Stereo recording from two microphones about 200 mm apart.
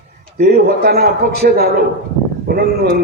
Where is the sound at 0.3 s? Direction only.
50° right (ahead or behind).